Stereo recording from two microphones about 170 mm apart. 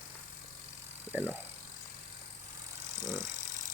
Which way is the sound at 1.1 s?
10° right (ahead or behind).